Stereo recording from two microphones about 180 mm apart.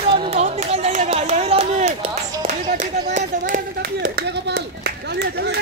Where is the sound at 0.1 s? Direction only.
35° right (ahead or behind).